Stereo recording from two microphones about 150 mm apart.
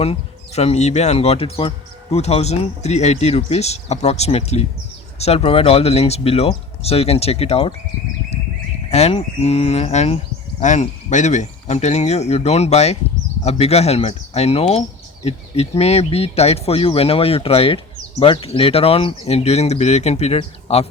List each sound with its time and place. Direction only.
0.0 s speech: 45° left (ahead or behind)
8.9 s speech: 45° left (ahead or behind)